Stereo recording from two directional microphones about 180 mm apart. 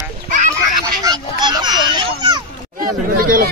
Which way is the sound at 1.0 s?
20° right (ahead or behind).